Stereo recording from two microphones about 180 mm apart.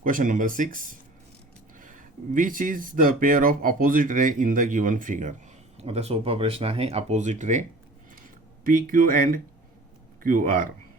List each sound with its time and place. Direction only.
0.0 s speech: 45° right (ahead or behind)
5.8 s speech: 35° right (ahead or behind)
8.6 s speech: 50° right (ahead or behind)